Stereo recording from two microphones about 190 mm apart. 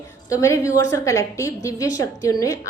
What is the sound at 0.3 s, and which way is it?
A woman's voice, 15° left (ahead or behind).